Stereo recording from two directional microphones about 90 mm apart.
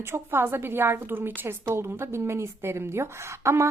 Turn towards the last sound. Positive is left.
turn(degrees=-30)  # may be behind; listen again after turning